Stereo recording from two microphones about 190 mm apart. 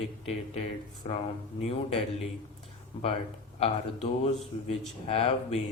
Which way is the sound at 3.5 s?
30° left (ahead or behind).